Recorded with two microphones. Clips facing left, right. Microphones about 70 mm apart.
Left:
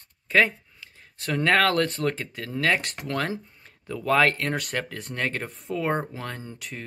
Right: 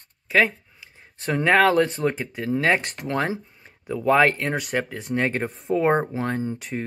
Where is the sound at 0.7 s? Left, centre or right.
Right.